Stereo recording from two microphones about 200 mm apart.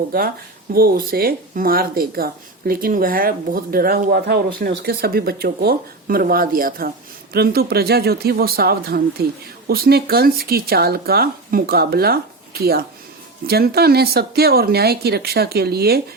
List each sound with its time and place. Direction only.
0.7 s speech: 50° right (ahead or behind)